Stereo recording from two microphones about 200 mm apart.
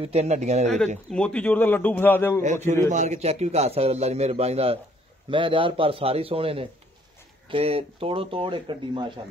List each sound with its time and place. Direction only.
0.0 s a man's voice: 30° right (ahead or behind)
1.1 s a man's voice: 5° left (ahead or behind)
2.4 s a man's voice: 35° right (ahead or behind)